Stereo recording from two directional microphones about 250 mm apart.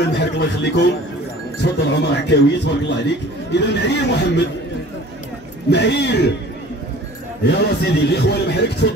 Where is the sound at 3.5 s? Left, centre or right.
Left.